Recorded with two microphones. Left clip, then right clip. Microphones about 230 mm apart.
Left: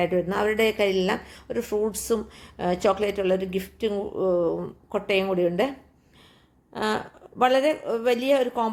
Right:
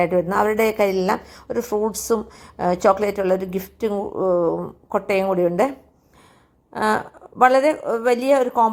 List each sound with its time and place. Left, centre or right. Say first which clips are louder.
0.0 s a woman's voice: right 5 dB; centre
6.7 s a woman's voice: right 6 dB; centre